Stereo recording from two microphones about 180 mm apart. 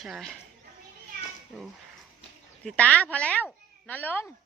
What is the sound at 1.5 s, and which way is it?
Speech, 5° right (ahead or behind).